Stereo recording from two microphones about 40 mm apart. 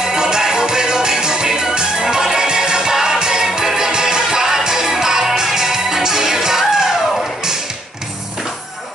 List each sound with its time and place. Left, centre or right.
0.0 s music: centre